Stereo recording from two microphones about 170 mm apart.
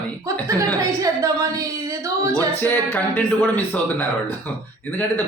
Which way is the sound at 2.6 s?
10° left (ahead or behind).